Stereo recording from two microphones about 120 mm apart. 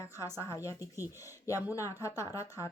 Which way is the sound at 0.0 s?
25° left (ahead or behind).